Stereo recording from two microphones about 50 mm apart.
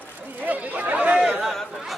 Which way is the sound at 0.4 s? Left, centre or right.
Right.